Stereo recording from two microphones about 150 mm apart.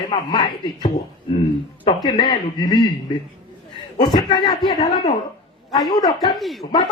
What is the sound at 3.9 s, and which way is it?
Speech, 30° left (ahead or behind).